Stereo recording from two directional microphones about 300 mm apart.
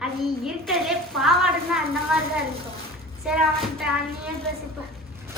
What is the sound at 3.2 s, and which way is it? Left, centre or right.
Speech, centre.